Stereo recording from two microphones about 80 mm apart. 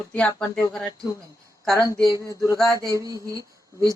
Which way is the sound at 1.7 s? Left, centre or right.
Right.